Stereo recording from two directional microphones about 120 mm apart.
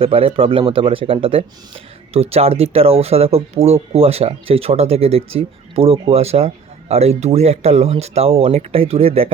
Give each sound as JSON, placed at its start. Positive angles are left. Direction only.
{"t": 0.0, "sound": "speech", "side_deg": -50}